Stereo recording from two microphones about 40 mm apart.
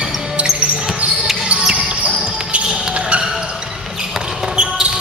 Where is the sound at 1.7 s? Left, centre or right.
Right.